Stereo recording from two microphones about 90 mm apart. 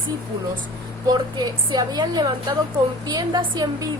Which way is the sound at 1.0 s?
55° right (ahead or behind).